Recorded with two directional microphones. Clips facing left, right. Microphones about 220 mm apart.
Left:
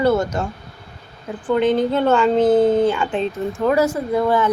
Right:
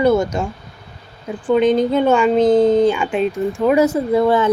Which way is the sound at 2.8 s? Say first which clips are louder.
Right 3 dB; 15° right (ahead or behind).